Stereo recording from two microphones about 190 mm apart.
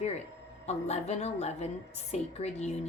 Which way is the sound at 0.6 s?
35° left (ahead or behind).